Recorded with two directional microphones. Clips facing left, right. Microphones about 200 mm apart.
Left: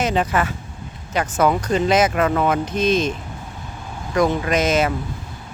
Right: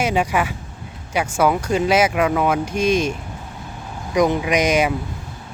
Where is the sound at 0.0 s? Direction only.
10° right (ahead or behind).